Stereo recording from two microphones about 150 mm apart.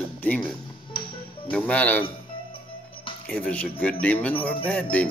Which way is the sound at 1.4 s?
10° left (ahead or behind).